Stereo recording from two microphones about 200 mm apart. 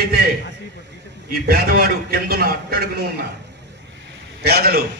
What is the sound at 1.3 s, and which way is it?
A man's voice, 50° right (ahead or behind).